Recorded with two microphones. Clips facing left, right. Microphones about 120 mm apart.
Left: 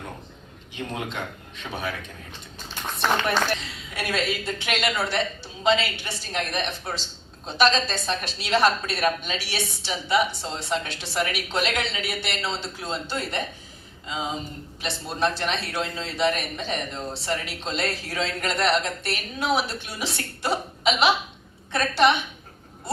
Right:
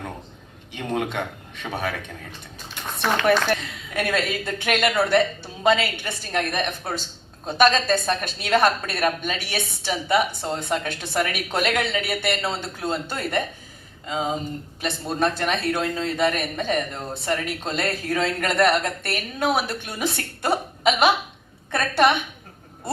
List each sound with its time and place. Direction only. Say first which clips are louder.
3.5 s speech: right 5 dB; 50° right (ahead or behind)